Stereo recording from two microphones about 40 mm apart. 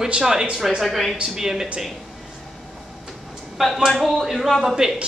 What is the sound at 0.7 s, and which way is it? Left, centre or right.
Speech, centre.